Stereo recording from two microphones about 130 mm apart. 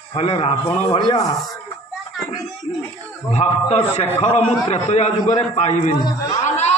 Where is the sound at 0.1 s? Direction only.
50° left (ahead or behind).